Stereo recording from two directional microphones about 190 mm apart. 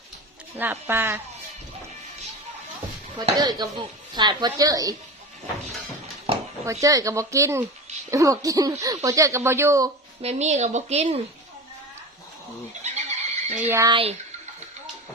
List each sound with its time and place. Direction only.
0.5 s speech: 10° right (ahead or behind)
3.2 s speech: 25° right (ahead or behind)
6.3 s a sound: 30° right (ahead or behind)
6.8 s speech: 15° right (ahead or behind)
10.2 s a woman's voice: 35° right (ahead or behind)
12.8 s neigh: 35° right (ahead or behind)
13.6 s speech: 15° right (ahead or behind)
13.9 s a woman's voice: 30° right (ahead or behind)